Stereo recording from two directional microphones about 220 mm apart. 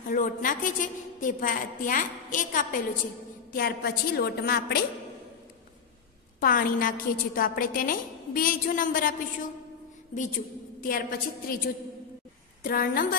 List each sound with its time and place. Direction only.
0.1 s a woman's voice: 35° left (ahead or behind)
6.4 s a woman's voice: 40° left (ahead or behind)
10.8 s a woman's voice: 40° left (ahead or behind)